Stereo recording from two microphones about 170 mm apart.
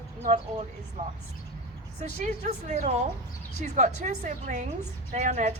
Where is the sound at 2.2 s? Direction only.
40° right (ahead or behind).